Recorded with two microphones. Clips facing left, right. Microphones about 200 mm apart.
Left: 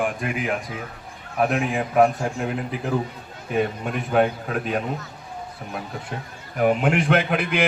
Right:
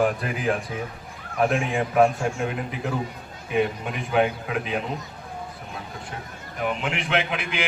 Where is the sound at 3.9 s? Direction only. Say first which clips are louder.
Left 2 dB; 45° left (ahead or behind).